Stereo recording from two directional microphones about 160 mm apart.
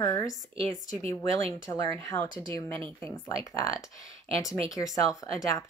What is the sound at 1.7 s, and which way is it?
Speech, 15° left (ahead or behind).